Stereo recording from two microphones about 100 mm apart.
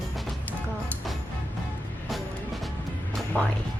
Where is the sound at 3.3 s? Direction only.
15° left (ahead or behind).